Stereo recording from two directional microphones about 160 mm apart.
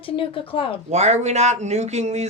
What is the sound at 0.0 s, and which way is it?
Speech, 35° left (ahead or behind).